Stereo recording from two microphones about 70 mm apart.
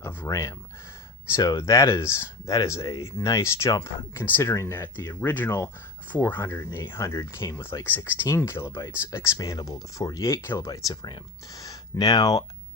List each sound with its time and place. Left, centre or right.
0.3 s speech: left
1.5 s speech: left
4.1 s speech: left
7.0 s speech: left
10.7 s speech: left
11.0 s speech: left